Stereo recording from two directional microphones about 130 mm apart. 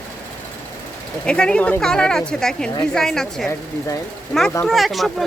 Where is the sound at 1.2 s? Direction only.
5° left (ahead or behind).